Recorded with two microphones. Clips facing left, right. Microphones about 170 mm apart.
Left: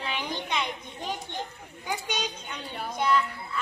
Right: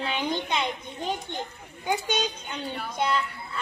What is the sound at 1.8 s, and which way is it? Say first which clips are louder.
Speech: right 5 dB; 25° right (ahead or behind).